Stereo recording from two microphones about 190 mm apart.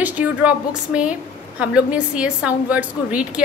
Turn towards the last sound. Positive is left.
turn(degrees=-5)  # may be behind; listen again after turning